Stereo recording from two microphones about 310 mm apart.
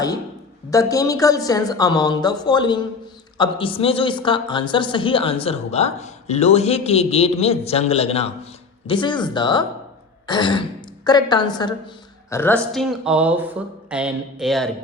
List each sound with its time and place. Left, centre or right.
0.7 s a woman's voice: centre